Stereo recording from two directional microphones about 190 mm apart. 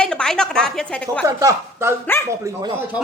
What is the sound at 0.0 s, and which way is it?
A woman's voice, 5° left (ahead or behind).